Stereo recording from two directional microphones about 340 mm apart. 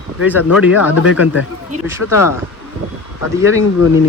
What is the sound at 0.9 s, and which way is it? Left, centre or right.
Speech, left.